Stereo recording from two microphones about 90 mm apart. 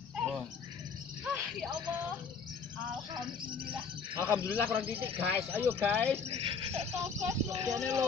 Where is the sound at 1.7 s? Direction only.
55° right (ahead or behind).